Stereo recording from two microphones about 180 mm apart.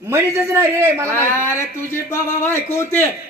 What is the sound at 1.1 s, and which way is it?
A man's voice, 15° left (ahead or behind).